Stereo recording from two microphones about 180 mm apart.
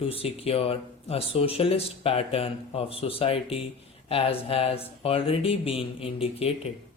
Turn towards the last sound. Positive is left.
turn(degrees=35)  # may be behind; listen again after turning